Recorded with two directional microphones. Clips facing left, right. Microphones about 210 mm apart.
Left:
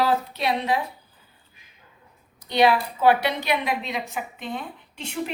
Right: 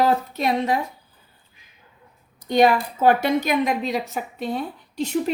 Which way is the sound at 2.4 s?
45° right (ahead or behind).